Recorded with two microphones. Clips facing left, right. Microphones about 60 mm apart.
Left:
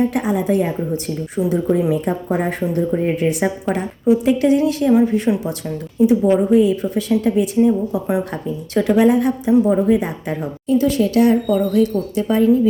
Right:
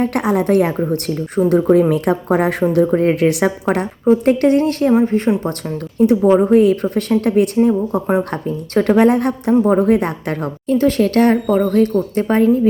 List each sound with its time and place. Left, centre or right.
0.0 s a woman's voice: right
2.7 s a woman's voice: right
4.9 s speech: right
6.0 s a woman's voice: right